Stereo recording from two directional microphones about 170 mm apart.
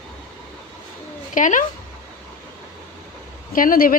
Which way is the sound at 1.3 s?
50° left (ahead or behind).